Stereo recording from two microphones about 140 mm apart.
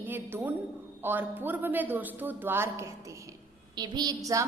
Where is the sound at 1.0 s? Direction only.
15° right (ahead or behind).